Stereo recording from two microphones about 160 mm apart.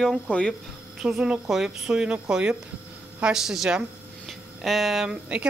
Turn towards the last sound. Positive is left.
turn(degrees=-5)  # may be behind; listen again after turning